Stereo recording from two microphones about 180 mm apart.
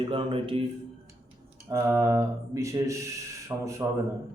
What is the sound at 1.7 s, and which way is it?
Mantra, 15° right (ahead or behind).